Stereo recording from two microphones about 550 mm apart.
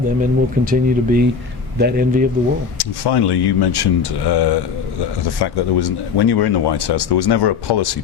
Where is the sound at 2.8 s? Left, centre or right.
Left.